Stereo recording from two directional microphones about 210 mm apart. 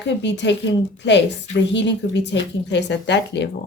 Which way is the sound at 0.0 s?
55° left (ahead or behind).